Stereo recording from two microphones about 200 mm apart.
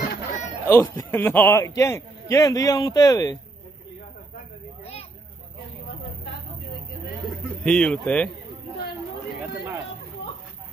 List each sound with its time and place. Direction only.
0.7 s a man's voice: 15° left (ahead or behind)
7.2 s a man's voice: 5° left (ahead or behind)